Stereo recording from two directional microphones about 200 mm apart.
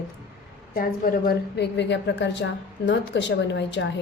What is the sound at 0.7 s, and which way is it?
A woman's voice, 45° left (ahead or behind).